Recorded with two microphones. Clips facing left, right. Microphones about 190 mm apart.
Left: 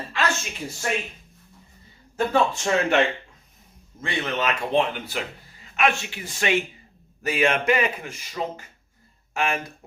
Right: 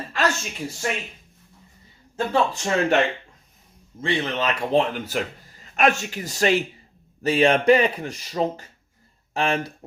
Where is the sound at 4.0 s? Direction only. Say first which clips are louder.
Right 2 dB; 30° right (ahead or behind).